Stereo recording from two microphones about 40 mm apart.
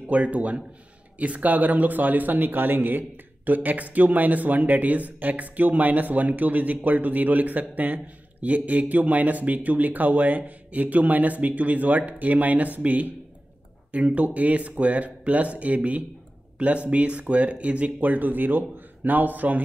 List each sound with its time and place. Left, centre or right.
0.1 s a man's voice: right